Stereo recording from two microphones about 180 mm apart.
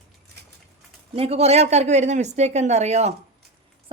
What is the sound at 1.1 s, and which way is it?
A woman's voice, 35° right (ahead or behind).